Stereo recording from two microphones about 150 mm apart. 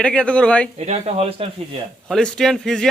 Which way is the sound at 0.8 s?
45° right (ahead or behind).